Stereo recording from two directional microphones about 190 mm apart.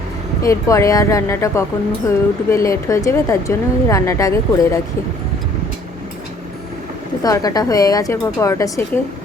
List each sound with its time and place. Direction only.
0.4 s speech: 15° left (ahead or behind)
7.2 s a woman's voice: 20° left (ahead or behind)